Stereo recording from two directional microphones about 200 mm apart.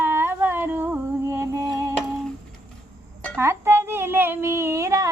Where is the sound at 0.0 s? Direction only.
10° right (ahead or behind).